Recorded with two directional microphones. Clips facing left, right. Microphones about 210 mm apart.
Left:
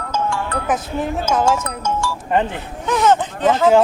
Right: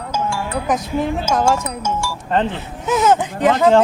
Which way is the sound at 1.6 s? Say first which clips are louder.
Left 1 dB; 10° right (ahead or behind).